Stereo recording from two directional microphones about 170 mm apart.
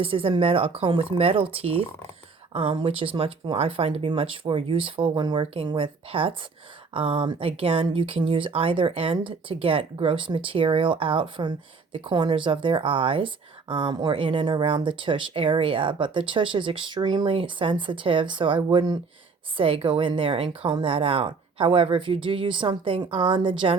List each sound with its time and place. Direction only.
0.0 s speech: 30° right (ahead or behind)